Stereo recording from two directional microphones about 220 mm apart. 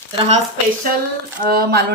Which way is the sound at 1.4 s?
45° right (ahead or behind).